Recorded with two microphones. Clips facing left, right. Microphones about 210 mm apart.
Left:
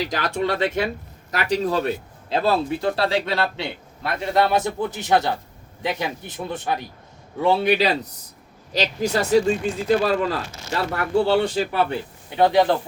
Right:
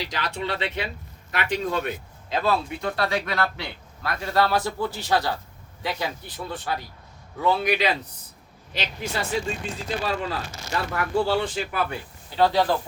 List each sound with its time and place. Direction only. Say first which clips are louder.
0.0 s a man's voice: left 6 dB; 45° left (ahead or behind)
11.3 s speech: left 5 dB; 30° left (ahead or behind)
12.4 s a man's voice: left 4 dB; 20° left (ahead or behind)